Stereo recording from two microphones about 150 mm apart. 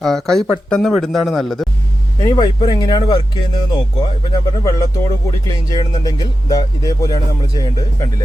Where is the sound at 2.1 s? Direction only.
25° left (ahead or behind).